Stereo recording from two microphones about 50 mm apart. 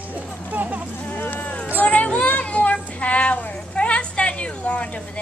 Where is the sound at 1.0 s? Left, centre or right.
Left.